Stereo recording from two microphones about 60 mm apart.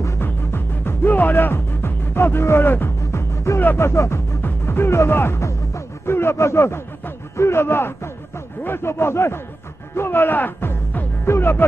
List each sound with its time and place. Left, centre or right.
0.2 s music: left
3.0 s music: left
4.4 s music: left
6.0 s speech: left
11.2 s music: left